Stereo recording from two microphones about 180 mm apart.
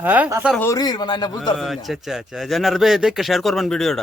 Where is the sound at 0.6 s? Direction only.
20° left (ahead or behind).